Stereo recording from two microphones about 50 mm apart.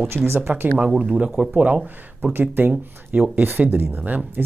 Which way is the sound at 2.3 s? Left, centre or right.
Right.